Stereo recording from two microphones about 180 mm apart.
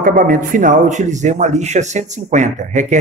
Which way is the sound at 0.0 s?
50° right (ahead or behind).